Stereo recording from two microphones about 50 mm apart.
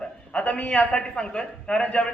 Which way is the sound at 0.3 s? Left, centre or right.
Left.